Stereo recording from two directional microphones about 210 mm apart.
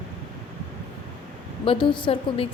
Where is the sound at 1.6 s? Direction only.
25° left (ahead or behind).